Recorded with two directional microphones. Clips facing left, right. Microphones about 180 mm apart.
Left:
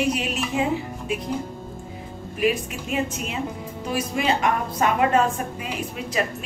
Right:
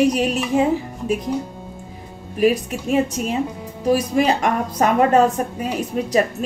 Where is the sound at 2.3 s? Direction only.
40° right (ahead or behind).